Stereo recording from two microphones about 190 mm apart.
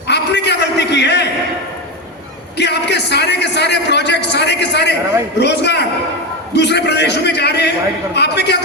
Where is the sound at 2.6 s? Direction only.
65° left (ahead or behind).